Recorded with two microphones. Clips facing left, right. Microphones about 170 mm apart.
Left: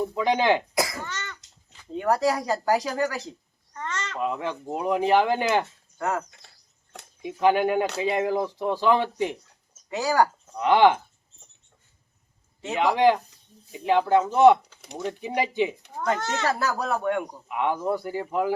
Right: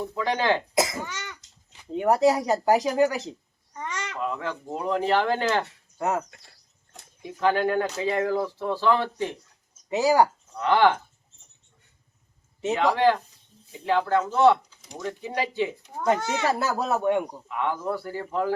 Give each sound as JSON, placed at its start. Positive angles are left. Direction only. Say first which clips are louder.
{"t": 0.0, "sound": "speech", "louder": "left 3 dB", "side_deg": 15}
{"t": 0.7, "sound": "a child's voice", "louder": "right 2 dB", "side_deg": -20}
{"t": 3.8, "sound": "a sound", "louder": "left 1 dB", "side_deg": -15}
{"t": 4.2, "sound": "speech", "louder": "left 2 dB", "side_deg": 15}
{"t": 6.0, "sound": "speech", "louder": "right 1 dB", "side_deg": -20}
{"t": 7.2, "sound": "speech", "louder": "left 2 dB", "side_deg": 15}
{"t": 9.9, "sound": "speech", "louder": "right 3 dB", "side_deg": -20}
{"t": 10.5, "sound": "speech", "louder": "left 2 dB", "side_deg": 15}
{"t": 12.7, "sound": "speech", "louder": "left 1 dB", "side_deg": 15}
{"t": 16.0, "sound": "a child's voice", "louder": "right 2 dB", "side_deg": -10}
{"t": 16.5, "sound": "speech", "louder": "right 1 dB", "side_deg": -25}
{"t": 17.5, "sound": "speech", "louder": "left 3 dB", "side_deg": 15}